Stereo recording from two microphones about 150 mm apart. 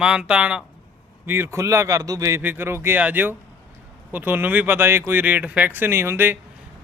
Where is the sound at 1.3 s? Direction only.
20° right (ahead or behind).